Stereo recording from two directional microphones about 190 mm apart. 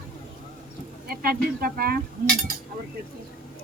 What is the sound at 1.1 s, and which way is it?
Speech, 50° right (ahead or behind).